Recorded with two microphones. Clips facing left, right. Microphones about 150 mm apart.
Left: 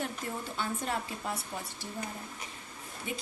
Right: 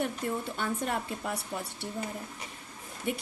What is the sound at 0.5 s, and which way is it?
Speech, 55° right (ahead or behind).